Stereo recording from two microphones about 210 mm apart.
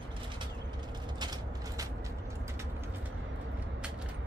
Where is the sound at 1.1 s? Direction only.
20° right (ahead or behind).